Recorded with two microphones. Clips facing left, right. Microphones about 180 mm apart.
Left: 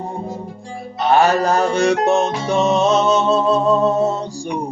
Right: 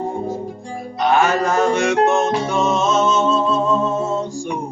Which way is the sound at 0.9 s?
35° left (ahead or behind).